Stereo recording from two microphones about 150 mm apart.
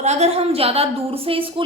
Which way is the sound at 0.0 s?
45° right (ahead or behind).